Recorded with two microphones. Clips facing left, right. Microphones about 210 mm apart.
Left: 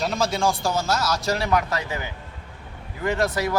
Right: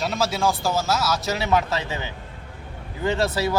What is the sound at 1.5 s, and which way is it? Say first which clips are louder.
A man's voice: right 1 dB; 25° right (ahead or behind).